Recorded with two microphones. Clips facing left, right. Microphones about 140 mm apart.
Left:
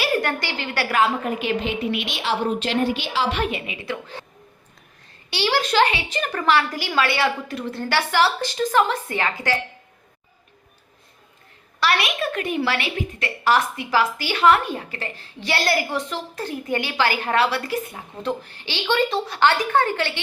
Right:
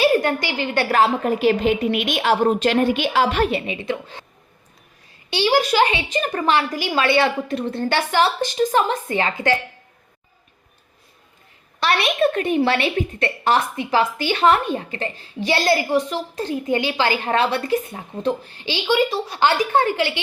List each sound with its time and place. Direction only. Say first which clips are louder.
0.0 s a woman's voice: right 6 dB; 20° right (ahead or behind)
0.9 s a woman's voice: right 2 dB; 35° right (ahead or behind)
3.8 s speech: right 4 dB; 15° right (ahead or behind)
5.3 s a woman's voice: right 3 dB; 15° right (ahead or behind)
11.8 s a woman's voice: right 4 dB; 25° right (ahead or behind)